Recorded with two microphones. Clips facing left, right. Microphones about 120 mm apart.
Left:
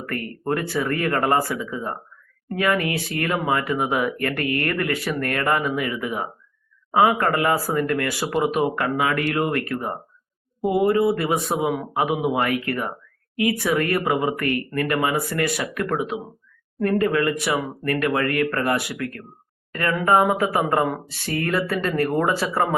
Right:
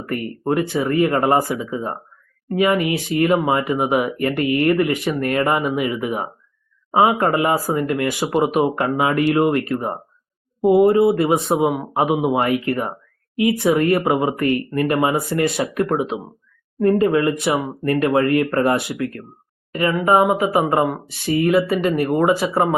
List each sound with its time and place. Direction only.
0.0 s speech: 20° right (ahead or behind)